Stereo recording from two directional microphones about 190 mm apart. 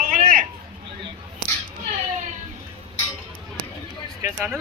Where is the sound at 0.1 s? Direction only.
45° right (ahead or behind).